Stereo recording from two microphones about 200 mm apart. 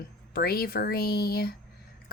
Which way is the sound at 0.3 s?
50° left (ahead or behind).